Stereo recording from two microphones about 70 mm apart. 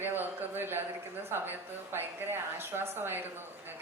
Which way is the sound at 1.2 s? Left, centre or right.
Right.